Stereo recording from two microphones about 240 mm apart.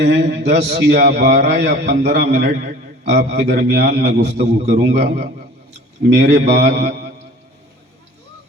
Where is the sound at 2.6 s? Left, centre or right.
Right.